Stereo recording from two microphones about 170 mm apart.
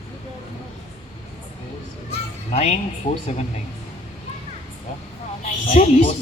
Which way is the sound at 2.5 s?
40° left (ahead or behind).